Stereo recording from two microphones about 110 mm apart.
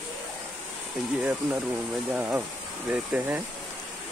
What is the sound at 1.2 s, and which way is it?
Speech, 15° right (ahead or behind).